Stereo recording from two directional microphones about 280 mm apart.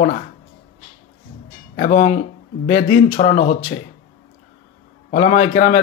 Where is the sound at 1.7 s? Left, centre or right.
Left.